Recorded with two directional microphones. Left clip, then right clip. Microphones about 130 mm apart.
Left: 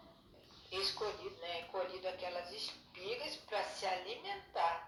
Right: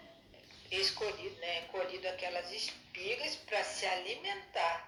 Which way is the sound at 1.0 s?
40° right (ahead or behind).